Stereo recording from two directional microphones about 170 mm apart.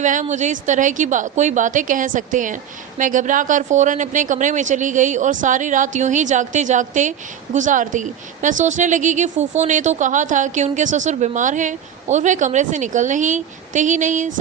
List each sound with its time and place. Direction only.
0.0 s speech: 45° right (ahead or behind)